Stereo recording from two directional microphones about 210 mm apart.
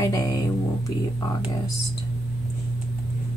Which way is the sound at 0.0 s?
15° left (ahead or behind).